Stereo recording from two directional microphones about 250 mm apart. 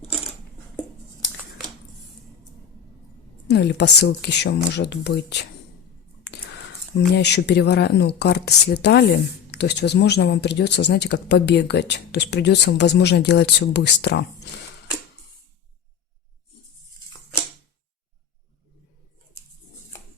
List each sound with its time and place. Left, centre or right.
3.5 s speech: left
6.2 s a sound: left
7.1 s speech: left